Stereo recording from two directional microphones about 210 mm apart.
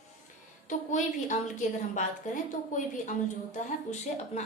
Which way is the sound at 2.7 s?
35° left (ahead or behind).